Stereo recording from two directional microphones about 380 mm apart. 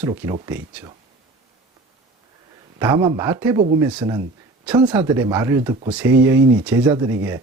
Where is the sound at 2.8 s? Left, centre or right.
Centre.